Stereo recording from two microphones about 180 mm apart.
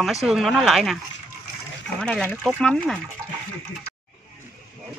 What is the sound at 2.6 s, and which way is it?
Speech, centre (ahead or behind).